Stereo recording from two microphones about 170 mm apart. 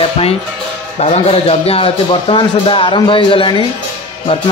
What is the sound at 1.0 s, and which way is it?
Speech, 35° left (ahead or behind).